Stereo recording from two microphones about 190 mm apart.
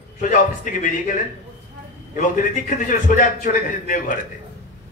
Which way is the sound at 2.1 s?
45° left (ahead or behind).